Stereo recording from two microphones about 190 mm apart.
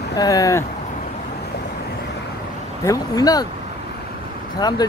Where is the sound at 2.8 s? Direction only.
20° left (ahead or behind).